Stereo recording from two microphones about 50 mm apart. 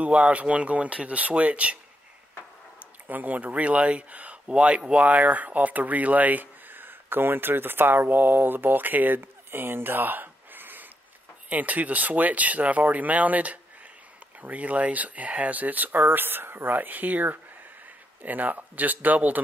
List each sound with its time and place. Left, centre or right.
0.0 s speech: right
2.8 s speech: right
9.2 s a sound: right
11.4 s speech: right